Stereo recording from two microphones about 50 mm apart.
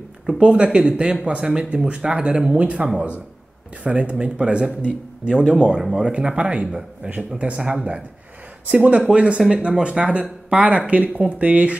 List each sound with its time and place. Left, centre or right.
0.4 s speech: right
5.8 s a man's voice: centre
6.0 s speech: right